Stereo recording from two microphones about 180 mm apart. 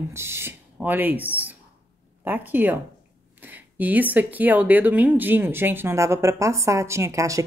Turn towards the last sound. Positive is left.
turn(degrees=-15)  # may be behind; listen again after turning